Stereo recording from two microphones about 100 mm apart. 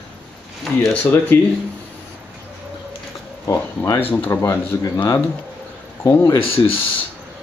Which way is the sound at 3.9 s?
20° left (ahead or behind).